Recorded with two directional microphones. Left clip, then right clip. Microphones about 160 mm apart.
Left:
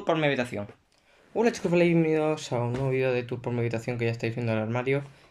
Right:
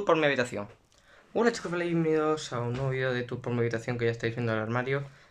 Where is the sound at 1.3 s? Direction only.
10° left (ahead or behind).